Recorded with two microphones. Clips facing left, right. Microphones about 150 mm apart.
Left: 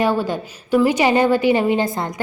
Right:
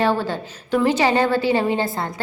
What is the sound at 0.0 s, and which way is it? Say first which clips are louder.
A woman's voice: left 1 dB; 15° left (ahead or behind).